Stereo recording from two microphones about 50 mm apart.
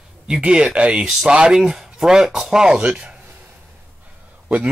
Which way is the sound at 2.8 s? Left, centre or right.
Right.